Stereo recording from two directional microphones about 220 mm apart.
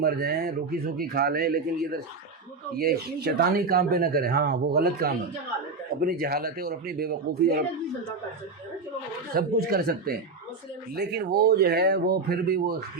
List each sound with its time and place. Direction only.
0.0 s speech: 45° right (ahead or behind)
9.3 s speech: 45° right (ahead or behind)